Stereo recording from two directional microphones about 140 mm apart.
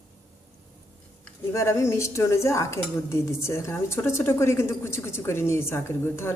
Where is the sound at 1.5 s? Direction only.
20° left (ahead or behind).